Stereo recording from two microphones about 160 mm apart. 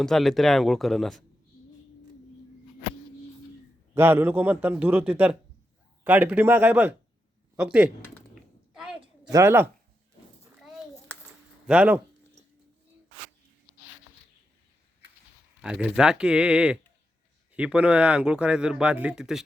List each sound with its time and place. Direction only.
0.0 s speech: centre (ahead or behind)
3.9 s speech: 15° right (ahead or behind)
8.7 s a sound: 5° right (ahead or behind)
9.3 s speech: 15° right (ahead or behind)
11.6 s speech: 5° right (ahead or behind)
15.6 s speech: 5° right (ahead or behind)